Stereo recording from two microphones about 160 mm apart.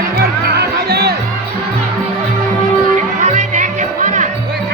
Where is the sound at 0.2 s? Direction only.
90° right.